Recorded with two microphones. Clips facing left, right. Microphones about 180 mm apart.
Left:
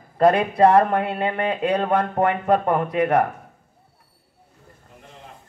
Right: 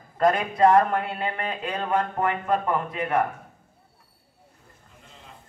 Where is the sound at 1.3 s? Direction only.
40° left (ahead or behind).